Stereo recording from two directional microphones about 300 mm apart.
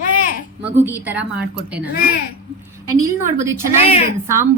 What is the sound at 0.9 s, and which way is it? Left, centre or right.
Speech, centre.